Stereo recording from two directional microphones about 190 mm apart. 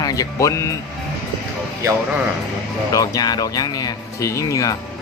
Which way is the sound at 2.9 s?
20° left (ahead or behind).